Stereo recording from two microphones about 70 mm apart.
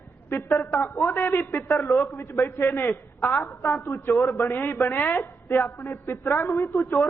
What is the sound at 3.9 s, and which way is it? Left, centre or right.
A man's voice, left.